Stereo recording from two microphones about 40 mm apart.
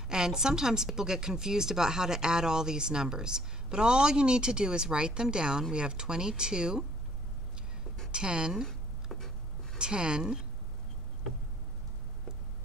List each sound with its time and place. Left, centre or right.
0.1 s a woman's voice: centre
8.1 s a woman's voice: right
8.6 s a sound: centre
9.8 s speech: right